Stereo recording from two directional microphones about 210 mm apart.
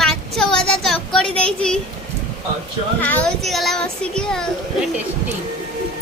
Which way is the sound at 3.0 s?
5° left (ahead or behind).